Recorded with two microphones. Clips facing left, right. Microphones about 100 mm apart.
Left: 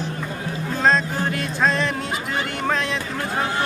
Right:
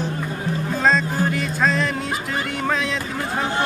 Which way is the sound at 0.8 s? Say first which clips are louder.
Even; centre (ahead or behind).